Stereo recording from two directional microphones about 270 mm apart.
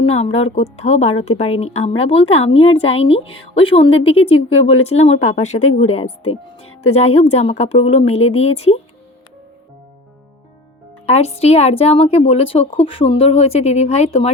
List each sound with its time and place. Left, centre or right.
0.1 s a woman's voice: left
11.0 s a woman's voice: left